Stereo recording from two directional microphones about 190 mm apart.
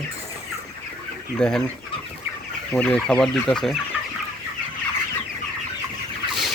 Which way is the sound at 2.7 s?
10° left (ahead or behind).